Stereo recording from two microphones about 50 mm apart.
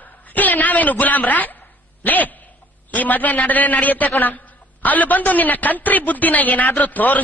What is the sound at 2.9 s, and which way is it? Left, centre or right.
A man's voice, left.